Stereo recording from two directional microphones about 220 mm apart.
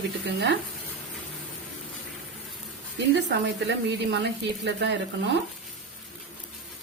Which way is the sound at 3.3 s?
50° right (ahead or behind).